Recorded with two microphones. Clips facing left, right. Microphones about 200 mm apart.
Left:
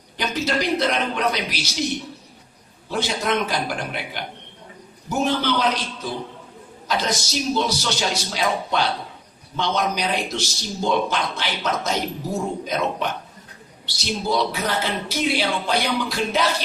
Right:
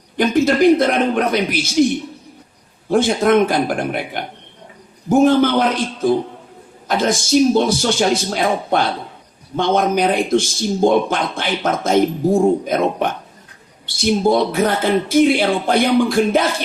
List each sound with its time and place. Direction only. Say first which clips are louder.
0.2 s a man's voice: right 10 dB; 50° right (ahead or behind)
2.9 s a man's voice: right 10 dB; 50° right (ahead or behind)